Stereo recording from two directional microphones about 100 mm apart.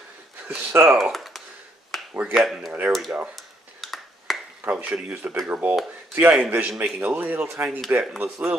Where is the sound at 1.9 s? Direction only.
Centre (ahead or behind).